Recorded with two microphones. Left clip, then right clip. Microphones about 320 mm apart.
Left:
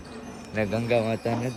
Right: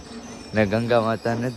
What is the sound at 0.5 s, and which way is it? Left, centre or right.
Speech, right.